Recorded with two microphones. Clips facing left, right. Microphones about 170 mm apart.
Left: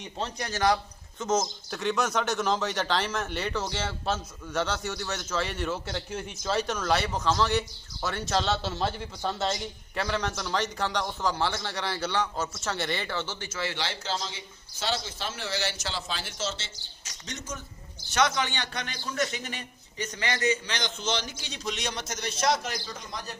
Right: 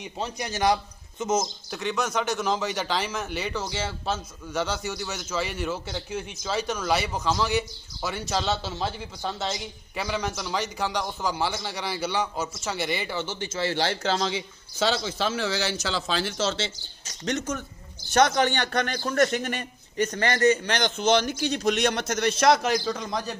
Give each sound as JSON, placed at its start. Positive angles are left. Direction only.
{"t": 0.0, "sound": "a man's voice", "side_deg": -15}
{"t": 1.7, "sound": "speech", "side_deg": 0}
{"t": 13.7, "sound": "a man's voice", "side_deg": -40}
{"t": 14.0, "sound": "a man's voice", "side_deg": -80}
{"t": 17.2, "sound": "a man's voice", "side_deg": -65}
{"t": 18.1, "sound": "a man's voice", "side_deg": -50}